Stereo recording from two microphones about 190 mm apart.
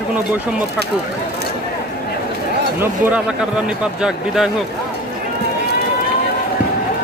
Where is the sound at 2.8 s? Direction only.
5° right (ahead or behind).